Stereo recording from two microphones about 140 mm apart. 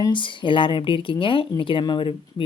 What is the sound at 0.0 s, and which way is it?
Speech, 35° left (ahead or behind).